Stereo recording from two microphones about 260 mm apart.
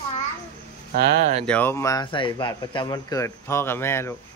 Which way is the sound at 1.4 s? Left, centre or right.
Centre.